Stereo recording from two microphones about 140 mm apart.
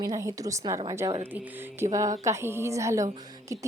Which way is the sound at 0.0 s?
20° right (ahead or behind).